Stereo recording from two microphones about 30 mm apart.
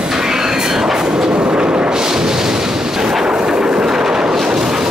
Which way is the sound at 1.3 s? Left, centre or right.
Right.